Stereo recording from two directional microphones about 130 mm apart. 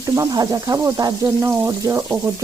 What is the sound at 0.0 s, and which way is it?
Speech, 25° right (ahead or behind).